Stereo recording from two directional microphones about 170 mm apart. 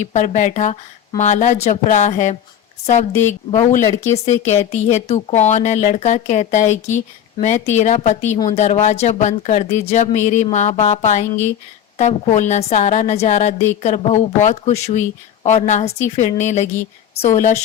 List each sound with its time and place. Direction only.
0.0 s a woman's voice: 45° left (ahead or behind)